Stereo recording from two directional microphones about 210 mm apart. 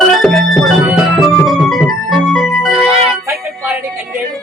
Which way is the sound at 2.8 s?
30° right (ahead or behind).